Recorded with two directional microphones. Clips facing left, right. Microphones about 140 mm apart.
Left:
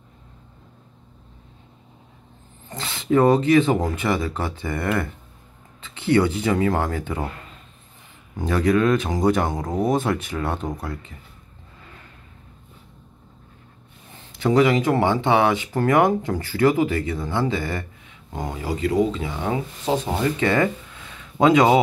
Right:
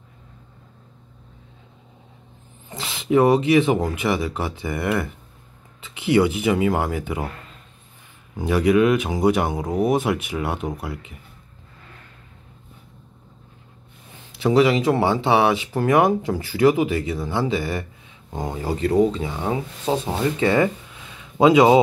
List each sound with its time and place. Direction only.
2.8 s speech: 15° right (ahead or behind)
5.9 s speech: 15° right (ahead or behind)
8.4 s speech: 10° right (ahead or behind)
14.5 s speech: 25° right (ahead or behind)
18.3 s speech: 30° right (ahead or behind)
20.3 s a sound: 20° right (ahead or behind)